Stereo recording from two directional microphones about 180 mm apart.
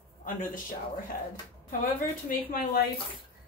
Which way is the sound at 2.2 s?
55° left (ahead or behind).